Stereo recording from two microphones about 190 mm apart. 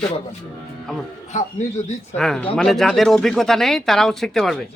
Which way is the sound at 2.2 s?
Centre (ahead or behind).